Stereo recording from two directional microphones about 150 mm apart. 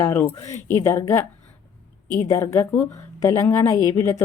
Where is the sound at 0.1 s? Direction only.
15° left (ahead or behind).